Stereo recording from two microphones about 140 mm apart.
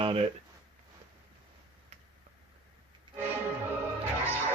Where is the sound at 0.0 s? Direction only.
40° right (ahead or behind).